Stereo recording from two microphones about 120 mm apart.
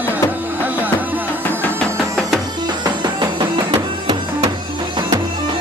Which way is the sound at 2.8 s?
40° right (ahead or behind).